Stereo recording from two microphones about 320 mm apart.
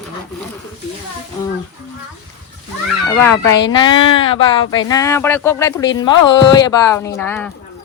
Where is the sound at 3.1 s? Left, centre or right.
Centre.